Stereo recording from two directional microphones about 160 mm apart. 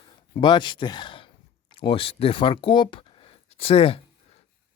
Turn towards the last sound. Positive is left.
turn(degrees=35)  # may be behind; listen again after turning